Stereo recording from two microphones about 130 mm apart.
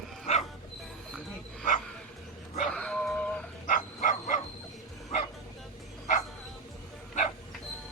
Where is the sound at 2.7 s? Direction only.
10° left (ahead or behind).